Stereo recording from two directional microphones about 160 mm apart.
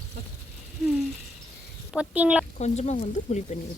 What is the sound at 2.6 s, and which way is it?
Speech, 45° left (ahead or behind).